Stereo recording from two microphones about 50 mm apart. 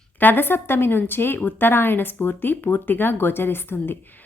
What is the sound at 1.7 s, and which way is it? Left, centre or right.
Speech, left.